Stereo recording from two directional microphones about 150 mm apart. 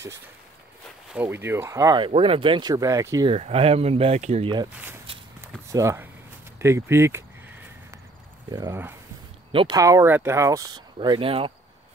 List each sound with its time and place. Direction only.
1.1 s speech: 15° right (ahead or behind)
2.0 s speech: 40° right (ahead or behind); by 3.3 s 20° right (ahead or behind)
3.3 s speech: 40° right (ahead or behind)
5.7 s speech: 20° right (ahead or behind)
8.5 s speech: 25° right (ahead or behind)
9.8 s speech: 20° right (ahead or behind); by 11.5 s 40° right (ahead or behind)